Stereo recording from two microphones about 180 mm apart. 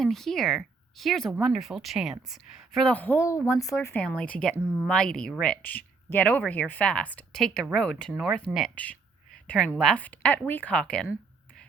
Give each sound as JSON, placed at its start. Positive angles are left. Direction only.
{"t": 0.0, "sound": "speech", "side_deg": 0}
{"t": 4.0, "sound": "speech", "side_deg": 5}